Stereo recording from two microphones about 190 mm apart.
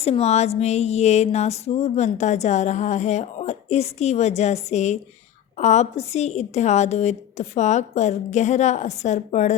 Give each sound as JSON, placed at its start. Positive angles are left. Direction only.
{"t": 0.0, "sound": "speech", "side_deg": 35}